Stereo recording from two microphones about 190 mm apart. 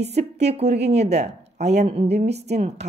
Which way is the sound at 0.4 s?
35° right (ahead or behind).